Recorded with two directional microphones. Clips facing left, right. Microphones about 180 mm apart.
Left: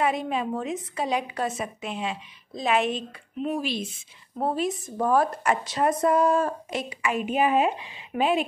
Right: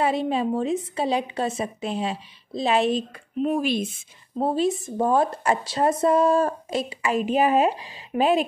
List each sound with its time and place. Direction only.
0.0 s a woman's voice: 30° right (ahead or behind); by 3.8 s 50° right (ahead or behind)
4.4 s a woman's voice: 25° right (ahead or behind)